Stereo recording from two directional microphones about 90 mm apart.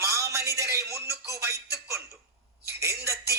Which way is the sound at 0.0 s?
35° right (ahead or behind).